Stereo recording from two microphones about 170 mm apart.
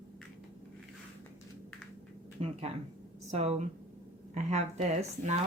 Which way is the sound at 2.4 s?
35° right (ahead or behind).